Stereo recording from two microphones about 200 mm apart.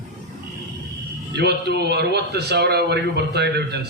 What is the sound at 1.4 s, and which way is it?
A man's voice, 55° right (ahead or behind).